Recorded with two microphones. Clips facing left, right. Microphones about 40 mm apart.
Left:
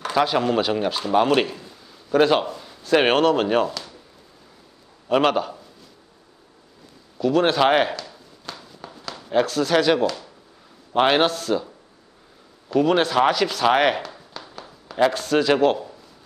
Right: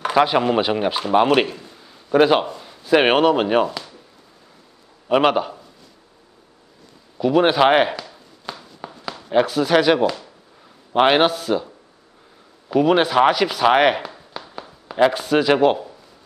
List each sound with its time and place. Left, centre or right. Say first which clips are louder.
0.0 s a man's voice: right 4 dB; centre
5.0 s a man's voice: right 2 dB; centre
7.2 s walk: right 3 dB; centre
9.3 s speech: right 3 dB; centre